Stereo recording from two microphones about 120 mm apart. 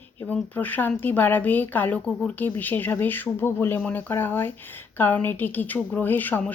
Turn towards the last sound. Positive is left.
turn(degrees=15)  # may be behind; listen again after turning